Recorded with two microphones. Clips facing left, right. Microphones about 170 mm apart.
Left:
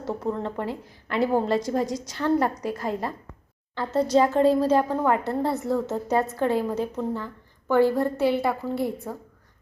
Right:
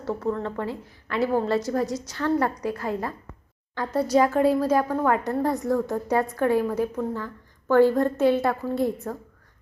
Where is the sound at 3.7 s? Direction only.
10° right (ahead or behind).